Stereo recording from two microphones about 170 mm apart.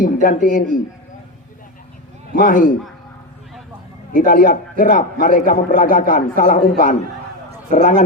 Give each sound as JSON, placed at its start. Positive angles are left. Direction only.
{"t": 0.0, "sound": "a man's voice", "side_deg": 50}
{"t": 2.4, "sound": "a man's voice", "side_deg": 55}
{"t": 4.1, "sound": "a man's voice", "side_deg": 55}
{"t": 7.7, "sound": "a man's voice", "side_deg": 45}